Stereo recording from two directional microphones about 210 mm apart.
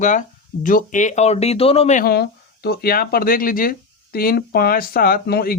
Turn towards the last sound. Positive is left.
turn(degrees=50)  # may be behind; listen again after turning